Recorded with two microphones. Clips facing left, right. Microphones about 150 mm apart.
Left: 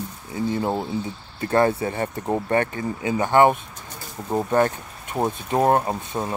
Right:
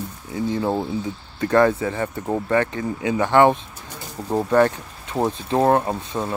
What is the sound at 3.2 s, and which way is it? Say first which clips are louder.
Speech: right 1 dB; 15° left (ahead or behind).